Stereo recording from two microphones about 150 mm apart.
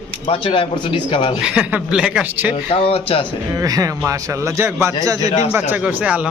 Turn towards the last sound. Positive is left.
turn(degrees=-10)  # may be behind; listen again after turning